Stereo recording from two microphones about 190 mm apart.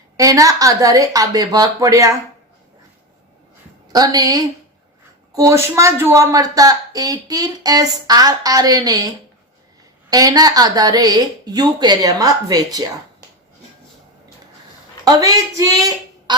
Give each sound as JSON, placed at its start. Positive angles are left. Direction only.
{"t": 0.2, "sound": "speech", "side_deg": -15}
{"t": 3.8, "sound": "a woman's voice", "side_deg": -20}
{"t": 15.0, "sound": "a woman's voice", "side_deg": -20}